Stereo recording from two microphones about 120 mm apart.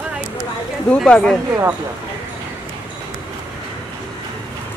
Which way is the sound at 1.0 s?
Centre (ahead or behind).